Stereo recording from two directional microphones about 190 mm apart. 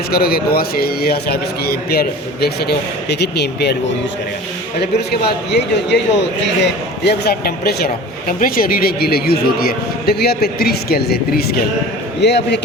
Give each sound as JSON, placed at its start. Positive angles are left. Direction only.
{"t": 0.1, "sound": "a man's voice", "side_deg": 55}
{"t": 5.5, "sound": "a man's voice", "side_deg": 65}